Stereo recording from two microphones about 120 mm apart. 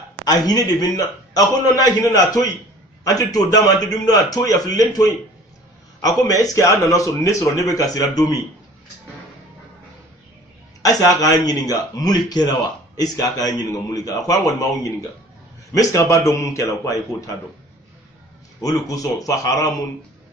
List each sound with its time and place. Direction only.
0.3 s a man's voice: 30° left (ahead or behind)
10.8 s a man's voice: 30° left (ahead or behind)
18.6 s a man's voice: 30° left (ahead or behind)